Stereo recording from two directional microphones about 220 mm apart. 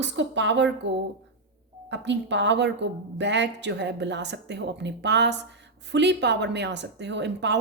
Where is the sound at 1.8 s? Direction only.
55° right (ahead or behind).